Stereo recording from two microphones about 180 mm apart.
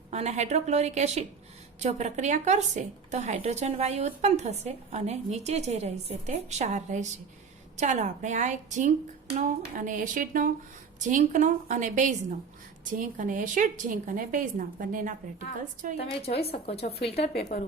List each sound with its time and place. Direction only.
0.1 s a woman's voice: 40° right (ahead or behind)
16.0 s a woman's voice: 35° left (ahead or behind)